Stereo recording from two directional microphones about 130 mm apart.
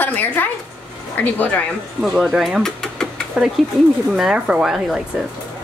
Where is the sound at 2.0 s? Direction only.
Centre (ahead or behind).